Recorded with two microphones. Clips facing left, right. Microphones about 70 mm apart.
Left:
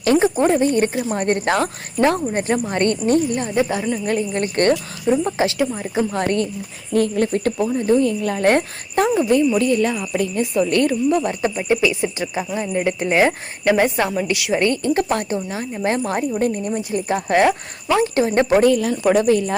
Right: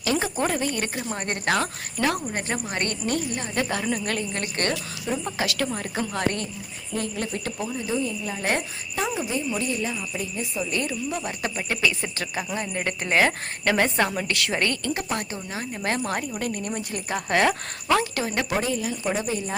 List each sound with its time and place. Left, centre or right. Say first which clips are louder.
0.2 s a woman's voice: left 9 dB; left
3.5 s a woman's voice: left 3 dB; centre
4.4 s speech: left 10 dB; left
5.0 s a woman's voice: left 10 dB; left
5.5 s a woman's voice: left 7 dB; centre
6.1 s speech: left 4 dB; left
6.9 s speech: left 11 dB; left
8.0 s speech: left 10 dB; left
9.6 s speech: left 10 dB; left
10.8 s speech: left 11 dB; left
11.7 s a woman's voice: left 7 dB; centre
14.9 s a woman's voice: left 9 dB; left; by 17.6 s centre
18.0 s speech: left 10 dB; left
18.6 s speech: left 11 dB; left